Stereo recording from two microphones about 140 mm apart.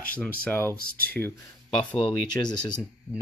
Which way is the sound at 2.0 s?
30° left (ahead or behind).